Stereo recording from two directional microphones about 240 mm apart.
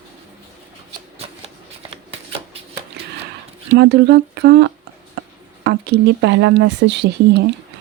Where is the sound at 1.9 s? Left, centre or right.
Right.